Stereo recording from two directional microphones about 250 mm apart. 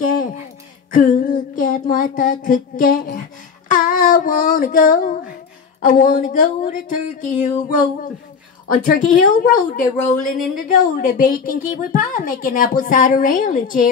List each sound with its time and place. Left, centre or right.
0.0 s a sound: left
5.8 s speech: left
8.6 s speech: left